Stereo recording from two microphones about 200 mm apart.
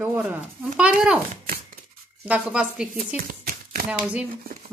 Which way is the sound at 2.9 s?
45° right (ahead or behind).